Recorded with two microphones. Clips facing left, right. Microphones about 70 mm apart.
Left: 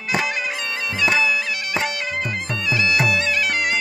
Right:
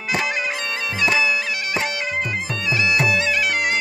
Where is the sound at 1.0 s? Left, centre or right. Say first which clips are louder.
Even; centre.